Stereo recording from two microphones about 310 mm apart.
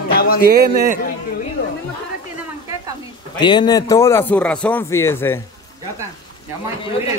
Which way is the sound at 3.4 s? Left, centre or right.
Centre.